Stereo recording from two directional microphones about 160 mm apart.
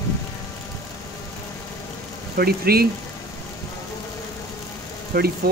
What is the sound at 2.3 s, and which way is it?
Speech, 70° right (ahead or behind).